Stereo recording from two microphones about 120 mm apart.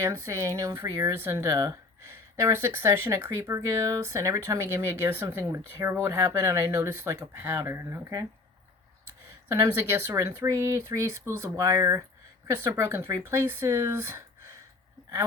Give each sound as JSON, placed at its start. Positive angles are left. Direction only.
{"t": 0.0, "sound": "speech", "side_deg": -25}
{"t": 9.5, "sound": "speech", "side_deg": -25}